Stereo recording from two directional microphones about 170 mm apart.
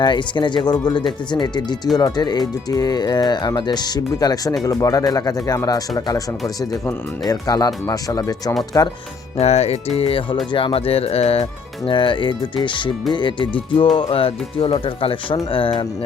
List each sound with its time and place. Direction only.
0.0 s speech: 25° left (ahead or behind)
9.4 s speech: 40° left (ahead or behind)